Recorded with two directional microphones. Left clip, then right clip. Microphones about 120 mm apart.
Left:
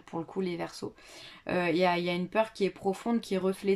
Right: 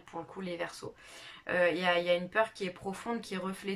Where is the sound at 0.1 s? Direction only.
40° left (ahead or behind).